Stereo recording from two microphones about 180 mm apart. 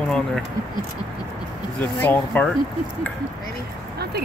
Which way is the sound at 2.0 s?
10° left (ahead or behind).